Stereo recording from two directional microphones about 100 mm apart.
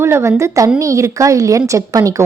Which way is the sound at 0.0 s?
25° right (ahead or behind).